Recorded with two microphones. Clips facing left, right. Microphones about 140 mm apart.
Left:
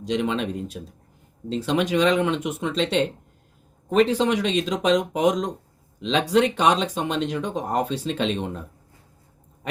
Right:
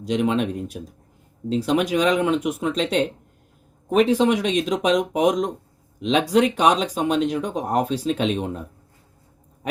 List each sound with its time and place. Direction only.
0.1 s speech: 5° right (ahead or behind)